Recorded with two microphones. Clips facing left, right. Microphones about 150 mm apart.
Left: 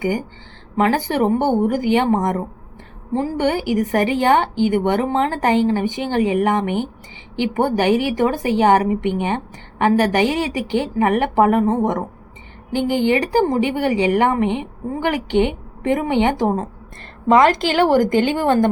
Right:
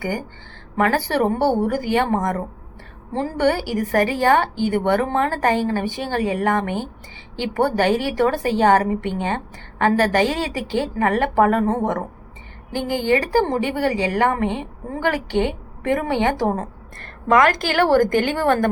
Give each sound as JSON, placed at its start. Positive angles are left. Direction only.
{"t": 0.0, "sound": "a woman's voice", "side_deg": 15}